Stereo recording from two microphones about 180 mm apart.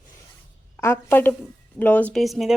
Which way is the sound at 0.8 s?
15° left (ahead or behind).